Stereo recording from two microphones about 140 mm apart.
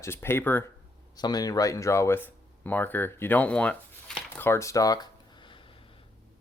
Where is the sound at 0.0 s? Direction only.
15° left (ahead or behind).